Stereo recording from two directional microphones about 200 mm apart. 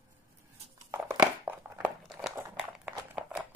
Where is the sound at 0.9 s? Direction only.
15° right (ahead or behind).